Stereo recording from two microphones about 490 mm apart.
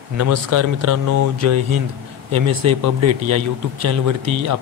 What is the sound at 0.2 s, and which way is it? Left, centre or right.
Speech, right.